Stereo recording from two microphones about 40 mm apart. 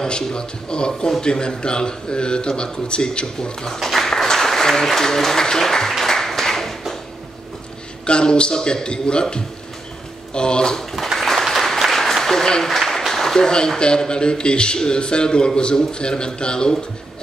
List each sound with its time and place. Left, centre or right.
0.0 s a man's voice: centre
3.9 s applause: centre
8.0 s a man's voice: left; by 11.1 s centre
11.1 s a sound: centre
11.8 s applause: centre
12.6 s a man's voice: centre